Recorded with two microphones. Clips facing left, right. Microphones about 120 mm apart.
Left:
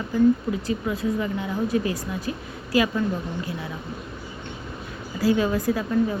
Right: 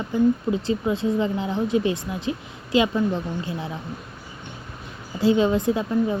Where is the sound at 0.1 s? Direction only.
25° right (ahead or behind).